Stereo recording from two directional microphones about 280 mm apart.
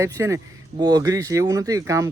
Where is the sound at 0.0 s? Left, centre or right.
Centre.